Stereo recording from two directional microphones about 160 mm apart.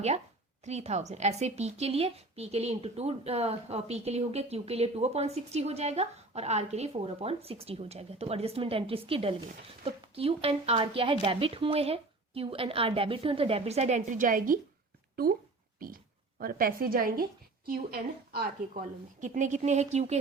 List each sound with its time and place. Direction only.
0.6 s a woman's voice: 45° right (ahead or behind)
15.1 s a sound: 65° right (ahead or behind)
16.4 s a woman's voice: 65° right (ahead or behind)
19.2 s speech: 50° right (ahead or behind)